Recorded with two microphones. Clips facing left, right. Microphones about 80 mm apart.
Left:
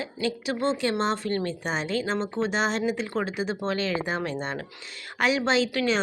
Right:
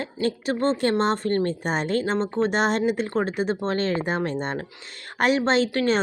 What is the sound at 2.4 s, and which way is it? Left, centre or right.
Speech, right.